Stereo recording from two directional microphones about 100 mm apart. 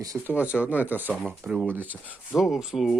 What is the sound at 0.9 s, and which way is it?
Speech, 20° right (ahead or behind).